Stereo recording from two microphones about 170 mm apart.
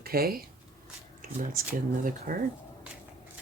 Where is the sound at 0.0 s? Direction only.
60° right (ahead or behind).